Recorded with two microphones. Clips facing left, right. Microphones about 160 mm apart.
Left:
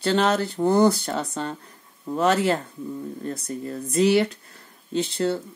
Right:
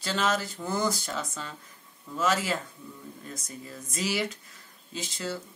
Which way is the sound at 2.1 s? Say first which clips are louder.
Left 7 dB; 60° left (ahead or behind).